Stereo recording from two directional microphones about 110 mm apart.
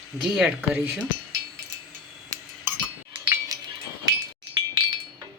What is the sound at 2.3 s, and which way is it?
Dishes, 25° right (ahead or behind).